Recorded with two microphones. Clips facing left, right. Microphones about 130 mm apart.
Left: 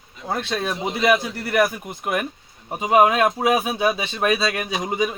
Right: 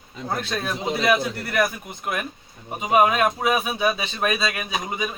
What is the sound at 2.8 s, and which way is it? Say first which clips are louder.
Speech: left 2 dB; 25° left (ahead or behind).